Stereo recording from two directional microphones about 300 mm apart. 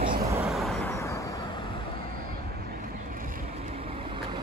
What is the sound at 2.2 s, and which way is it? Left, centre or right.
Vehicle, right.